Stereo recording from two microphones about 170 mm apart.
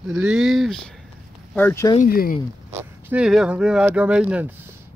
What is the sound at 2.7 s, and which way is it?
Speech, 15° right (ahead or behind).